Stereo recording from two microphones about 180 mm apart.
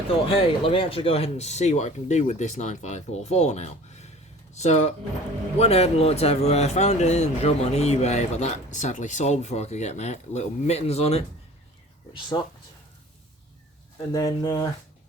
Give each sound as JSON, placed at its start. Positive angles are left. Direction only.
{"t": 0.3, "sound": "speech", "side_deg": 30}
{"t": 12.3, "sound": "speech", "side_deg": 20}
{"t": 14.1, "sound": "speech", "side_deg": 20}